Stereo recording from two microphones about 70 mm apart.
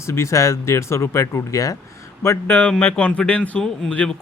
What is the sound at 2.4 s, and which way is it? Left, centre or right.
Speech, left.